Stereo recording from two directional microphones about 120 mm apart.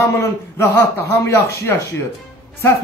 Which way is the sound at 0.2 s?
20° left (ahead or behind).